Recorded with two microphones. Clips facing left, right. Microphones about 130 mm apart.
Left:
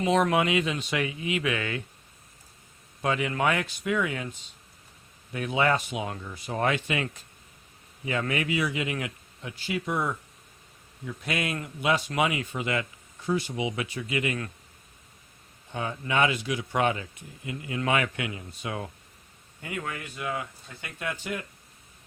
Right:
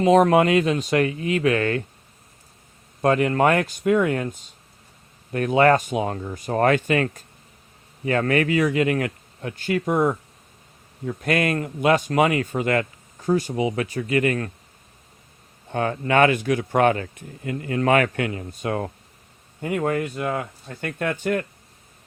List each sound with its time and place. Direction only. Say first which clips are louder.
0.0 s speech: right 8 dB; 45° right (ahead or behind)
3.0 s speech: right 8 dB; 50° right (ahead or behind)
15.7 s speech: right 8 dB; 60° right (ahead or behind)